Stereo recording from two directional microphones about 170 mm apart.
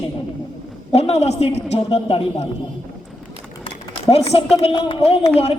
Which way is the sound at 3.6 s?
35° left (ahead or behind).